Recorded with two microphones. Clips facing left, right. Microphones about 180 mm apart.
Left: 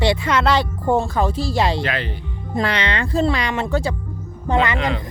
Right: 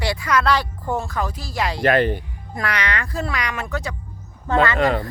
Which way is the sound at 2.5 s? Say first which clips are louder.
Left 4 dB; 25° left (ahead or behind).